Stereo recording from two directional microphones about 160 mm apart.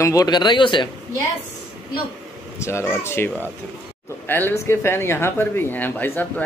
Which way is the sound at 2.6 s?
15° left (ahead or behind).